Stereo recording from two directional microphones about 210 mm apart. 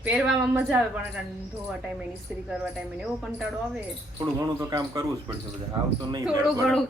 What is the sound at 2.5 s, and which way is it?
Speech, 5° right (ahead or behind).